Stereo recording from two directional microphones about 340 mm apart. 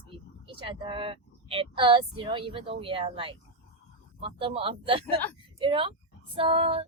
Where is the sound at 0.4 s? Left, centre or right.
Centre.